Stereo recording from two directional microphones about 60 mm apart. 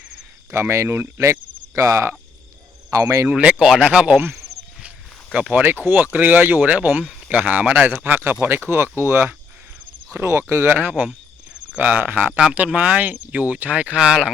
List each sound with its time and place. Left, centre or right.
0.5 s speech: right
1.3 s cricket: right
2.9 s speech: right
3.3 s speech: centre
5.3 s speech: centre
5.8 s speech: right
10.7 s speech: right